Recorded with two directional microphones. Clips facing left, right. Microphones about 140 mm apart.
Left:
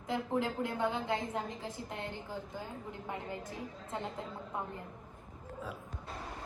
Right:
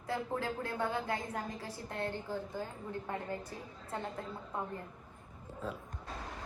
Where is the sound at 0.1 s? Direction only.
20° left (ahead or behind).